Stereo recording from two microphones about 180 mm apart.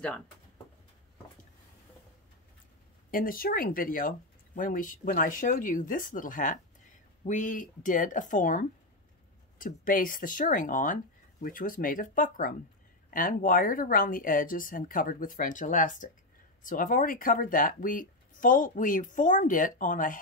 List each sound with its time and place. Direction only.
3.1 s speech: 50° left (ahead or behind)